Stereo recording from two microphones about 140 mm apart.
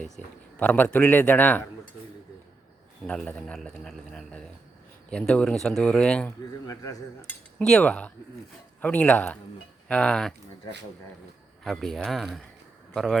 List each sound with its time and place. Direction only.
0.6 s speech: 10° left (ahead or behind)
3.1 s speech: 5° left (ahead or behind)
6.7 s cutlery: 25° left (ahead or behind)
7.6 s speech: 5° left (ahead or behind)
11.6 s speech: centre (ahead or behind)